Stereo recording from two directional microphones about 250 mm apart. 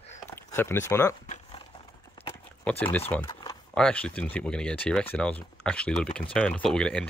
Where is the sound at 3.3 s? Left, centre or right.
Centre.